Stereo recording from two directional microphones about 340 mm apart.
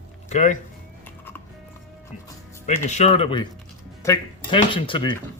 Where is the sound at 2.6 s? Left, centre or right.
Centre.